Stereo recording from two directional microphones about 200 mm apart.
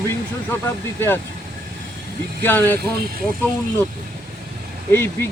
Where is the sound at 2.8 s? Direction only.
50° right (ahead or behind).